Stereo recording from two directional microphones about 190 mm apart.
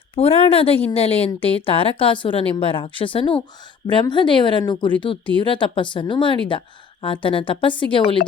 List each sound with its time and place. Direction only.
0.2 s a woman's voice: 30° left (ahead or behind)